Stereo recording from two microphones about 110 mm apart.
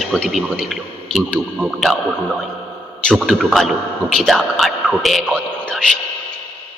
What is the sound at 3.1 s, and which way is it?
A man's voice, 5° left (ahead or behind).